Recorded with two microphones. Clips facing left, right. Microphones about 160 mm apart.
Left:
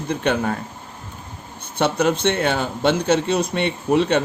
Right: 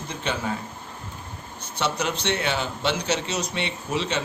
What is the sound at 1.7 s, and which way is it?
A man's voice, 55° left (ahead or behind).